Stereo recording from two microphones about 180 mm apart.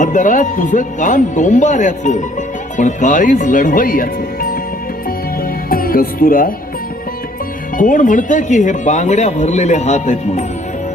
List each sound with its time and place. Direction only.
0.0 s speech: 45° left (ahead or behind)
5.6 s speech: 50° left (ahead or behind)
7.8 s speech: 45° left (ahead or behind)